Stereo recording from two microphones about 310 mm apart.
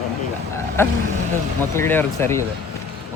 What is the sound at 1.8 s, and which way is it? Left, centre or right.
Speech, centre.